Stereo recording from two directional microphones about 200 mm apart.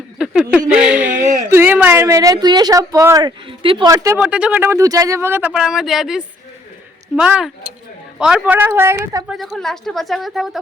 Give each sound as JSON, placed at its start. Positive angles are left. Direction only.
{"t": 0.2, "sound": "speech", "side_deg": -5}
{"t": 4.2, "sound": "a woman's voice", "side_deg": -5}
{"t": 9.3, "sound": "a woman's voice", "side_deg": 0}